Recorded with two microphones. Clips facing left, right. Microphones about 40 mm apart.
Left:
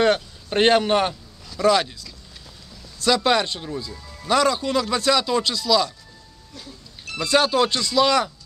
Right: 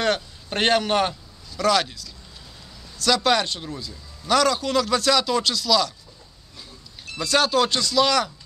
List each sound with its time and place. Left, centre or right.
0.0 s a man's voice: centre
3.0 s speech: centre
7.2 s speech: centre